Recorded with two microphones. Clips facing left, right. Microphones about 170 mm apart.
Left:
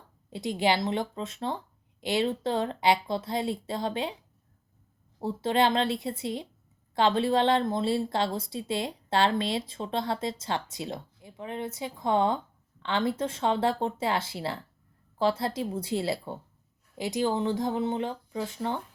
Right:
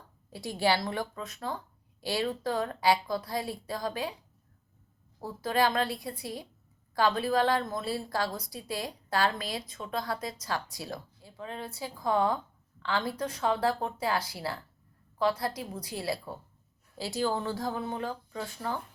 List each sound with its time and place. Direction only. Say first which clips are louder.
0.3 s a woman's voice: left 2 dB; 20° left (ahead or behind)
5.2 s a woman's voice: left 3 dB; 25° left (ahead or behind)